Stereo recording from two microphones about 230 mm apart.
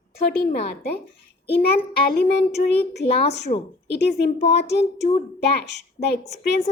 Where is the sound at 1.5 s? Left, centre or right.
Left.